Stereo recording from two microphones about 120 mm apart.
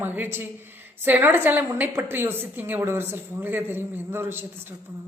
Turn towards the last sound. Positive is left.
turn(degrees=-20)  # may be behind; listen again after turning